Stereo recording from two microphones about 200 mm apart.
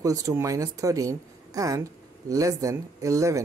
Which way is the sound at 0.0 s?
15° right (ahead or behind).